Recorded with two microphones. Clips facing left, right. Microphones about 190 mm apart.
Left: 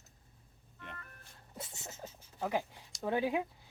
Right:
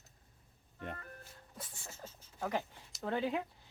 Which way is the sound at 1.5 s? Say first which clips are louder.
Left 4 dB; 25° left (ahead or behind).